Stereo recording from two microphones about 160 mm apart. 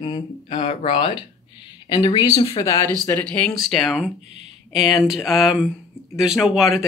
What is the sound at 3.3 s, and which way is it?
Speech, 5° left (ahead or behind).